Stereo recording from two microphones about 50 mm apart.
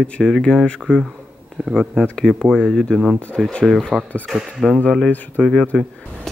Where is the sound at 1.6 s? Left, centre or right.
Right.